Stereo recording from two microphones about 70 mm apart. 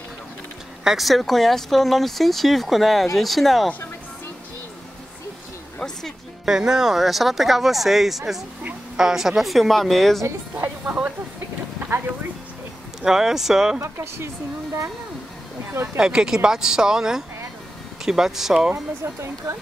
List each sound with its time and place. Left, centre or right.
0.8 s speech: centre
6.4 s speech: centre
10.5 s music: right
13.0 s speech: centre
13.7 s speech: right
15.7 s speech: right
16.0 s speech: centre
19.1 s speech: right